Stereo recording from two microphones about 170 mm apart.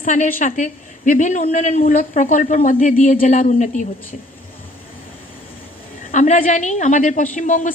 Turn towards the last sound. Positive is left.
turn(degrees=50)  # may be behind; listen again after turning